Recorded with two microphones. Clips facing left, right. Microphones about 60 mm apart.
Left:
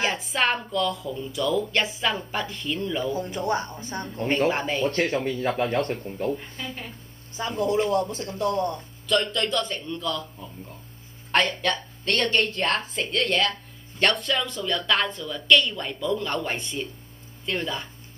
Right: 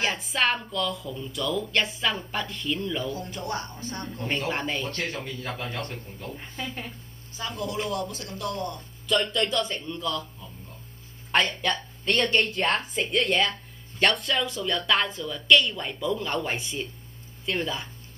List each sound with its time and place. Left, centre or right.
0.0 s a woman's voice: centre
3.1 s speech: left
4.6 s a woman's voice: centre
4.9 s a man's voice: left
7.3 s speech: left
9.0 s a woman's voice: centre
11.3 s a woman's voice: centre